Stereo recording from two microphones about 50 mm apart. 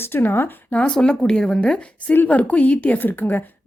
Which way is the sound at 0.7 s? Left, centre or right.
Left.